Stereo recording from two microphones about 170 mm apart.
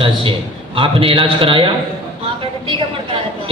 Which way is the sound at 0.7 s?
30° right (ahead or behind).